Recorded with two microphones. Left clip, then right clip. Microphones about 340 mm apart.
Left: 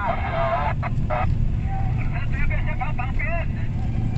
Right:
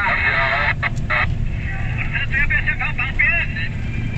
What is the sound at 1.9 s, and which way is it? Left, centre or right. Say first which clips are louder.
Vehicle: right 12 dB; right.